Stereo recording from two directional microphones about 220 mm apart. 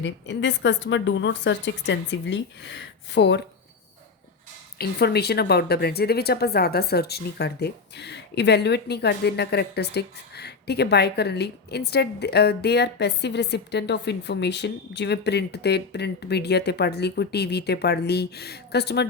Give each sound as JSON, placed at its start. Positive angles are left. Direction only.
{"t": 0.0, "sound": "a woman's voice", "side_deg": 55}
{"t": 4.8, "sound": "a woman's voice", "side_deg": 45}